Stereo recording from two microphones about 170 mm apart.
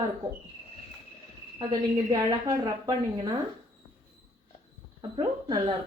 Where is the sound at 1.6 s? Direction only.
25° right (ahead or behind).